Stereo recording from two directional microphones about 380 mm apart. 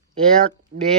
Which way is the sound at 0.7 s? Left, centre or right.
Right.